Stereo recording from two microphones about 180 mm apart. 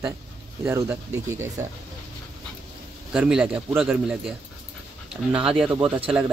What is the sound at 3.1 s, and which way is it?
A man's voice, 5° right (ahead or behind).